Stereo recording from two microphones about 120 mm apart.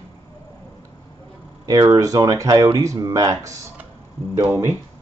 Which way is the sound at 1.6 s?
35° right (ahead or behind).